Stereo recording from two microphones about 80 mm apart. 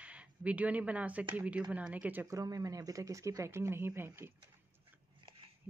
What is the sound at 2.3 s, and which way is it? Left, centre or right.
Speech, right.